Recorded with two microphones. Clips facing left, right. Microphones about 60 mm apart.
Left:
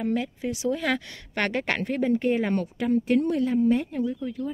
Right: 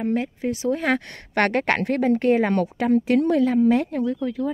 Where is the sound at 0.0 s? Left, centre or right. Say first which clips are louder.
Right 3 dB; right.